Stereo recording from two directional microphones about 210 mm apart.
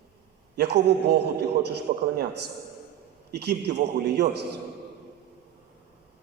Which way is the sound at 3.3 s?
50° right (ahead or behind).